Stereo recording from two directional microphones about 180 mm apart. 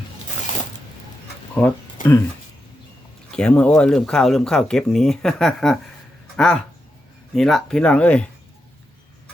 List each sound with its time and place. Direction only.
2.0 s speech: 50° left (ahead or behind)
3.3 s speech: 5° left (ahead or behind)